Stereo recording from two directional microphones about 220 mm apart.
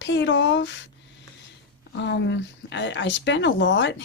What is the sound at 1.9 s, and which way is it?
A woman's voice, 55° left (ahead or behind).